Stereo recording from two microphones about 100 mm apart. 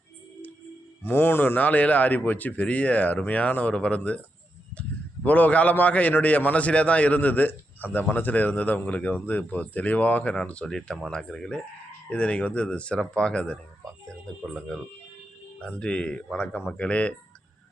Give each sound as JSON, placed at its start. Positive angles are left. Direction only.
{"t": 1.0, "sound": "a man's voice", "side_deg": 20}